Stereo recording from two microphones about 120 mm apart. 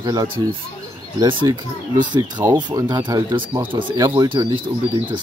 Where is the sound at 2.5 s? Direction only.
40° right (ahead or behind).